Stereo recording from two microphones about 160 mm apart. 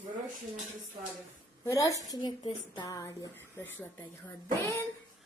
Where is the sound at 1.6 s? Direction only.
20° left (ahead or behind).